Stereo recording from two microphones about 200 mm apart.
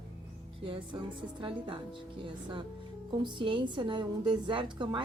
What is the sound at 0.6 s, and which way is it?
Speech, 25° right (ahead or behind).